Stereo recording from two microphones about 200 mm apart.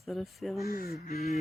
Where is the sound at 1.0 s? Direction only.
35° left (ahead or behind).